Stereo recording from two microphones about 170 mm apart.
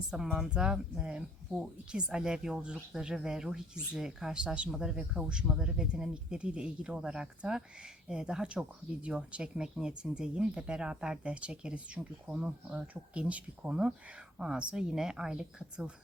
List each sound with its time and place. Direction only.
0.1 s speech: 5° right (ahead or behind)